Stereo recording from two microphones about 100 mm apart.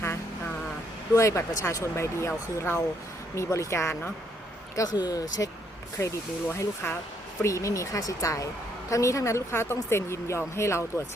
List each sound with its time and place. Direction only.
1.1 s speech: 30° left (ahead or behind)
4.7 s speech: 40° left (ahead or behind)